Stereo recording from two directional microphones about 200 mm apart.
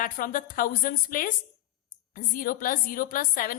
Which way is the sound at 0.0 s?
45° left (ahead or behind).